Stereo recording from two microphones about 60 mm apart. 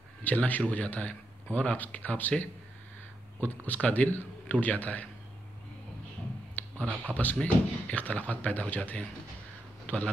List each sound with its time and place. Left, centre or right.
0.2 s a man's voice: left
6.6 s a sound: left
7.1 s speech: right
7.4 s a man's voice: left